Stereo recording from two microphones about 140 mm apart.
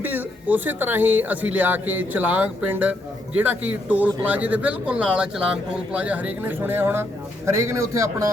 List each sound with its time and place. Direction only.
0.0 s speech: 15° right (ahead or behind)